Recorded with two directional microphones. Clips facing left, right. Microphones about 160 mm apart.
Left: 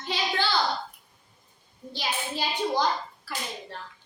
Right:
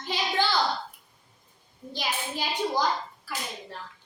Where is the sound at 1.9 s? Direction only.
10° right (ahead or behind).